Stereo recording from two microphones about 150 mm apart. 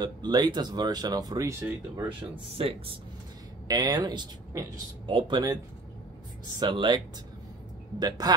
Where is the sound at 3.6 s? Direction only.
25° right (ahead or behind).